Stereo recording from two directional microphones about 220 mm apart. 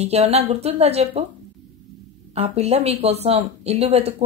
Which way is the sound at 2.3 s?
30° right (ahead or behind).